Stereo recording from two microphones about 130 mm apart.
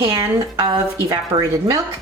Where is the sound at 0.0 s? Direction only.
20° right (ahead or behind).